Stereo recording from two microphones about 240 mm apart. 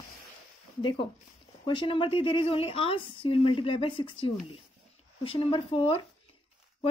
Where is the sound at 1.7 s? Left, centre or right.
Left.